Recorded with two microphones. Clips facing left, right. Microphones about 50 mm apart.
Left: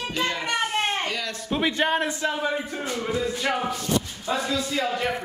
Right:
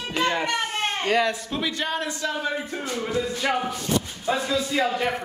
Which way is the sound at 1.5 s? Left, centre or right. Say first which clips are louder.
Left 4 dB; left.